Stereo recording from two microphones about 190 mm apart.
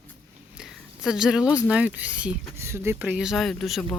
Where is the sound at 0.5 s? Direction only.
5° right (ahead or behind).